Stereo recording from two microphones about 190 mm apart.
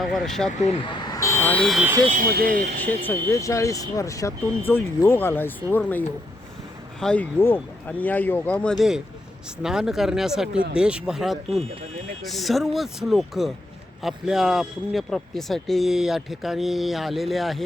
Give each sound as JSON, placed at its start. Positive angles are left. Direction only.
{"t": 0.0, "sound": "a man's voice", "side_deg": 0}
{"t": 0.6, "sound": "speech", "side_deg": 30}
{"t": 2.0, "sound": "speech", "side_deg": -45}
{"t": 2.8, "sound": "speech", "side_deg": 10}
{"t": 7.0, "sound": "a man's voice", "side_deg": 5}